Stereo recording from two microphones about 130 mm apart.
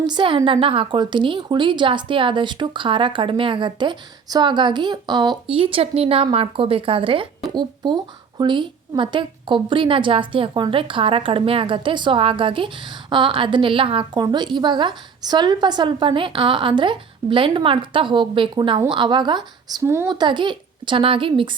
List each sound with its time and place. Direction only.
0.0 s a woman's voice: 35° right (ahead or behind)
8.4 s a woman's voice: 35° right (ahead or behind)
19.8 s speech: 20° right (ahead or behind)
20.1 s a woman's voice: 35° right (ahead or behind)